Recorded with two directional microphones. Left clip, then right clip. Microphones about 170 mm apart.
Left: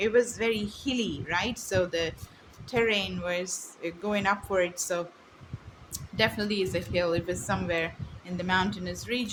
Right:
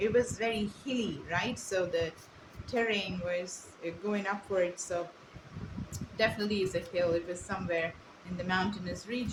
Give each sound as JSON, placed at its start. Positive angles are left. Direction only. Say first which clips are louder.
{"t": 0.0, "sound": "a woman's voice", "louder": "left 4 dB", "side_deg": 55}